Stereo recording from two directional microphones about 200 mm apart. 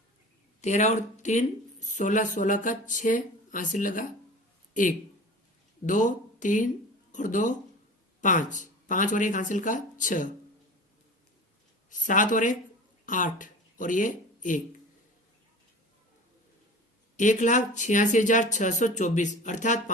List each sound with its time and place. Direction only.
0.6 s speech: 35° left (ahead or behind)
11.9 s speech: 40° left (ahead or behind)
17.2 s speech: 40° left (ahead or behind)